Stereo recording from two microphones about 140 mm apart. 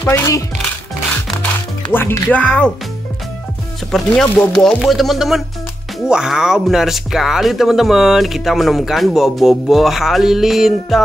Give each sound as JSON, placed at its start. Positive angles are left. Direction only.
{"t": 0.0, "sound": "speech", "side_deg": 20}
{"t": 1.9, "sound": "speech", "side_deg": 15}
{"t": 3.9, "sound": "speech", "side_deg": 5}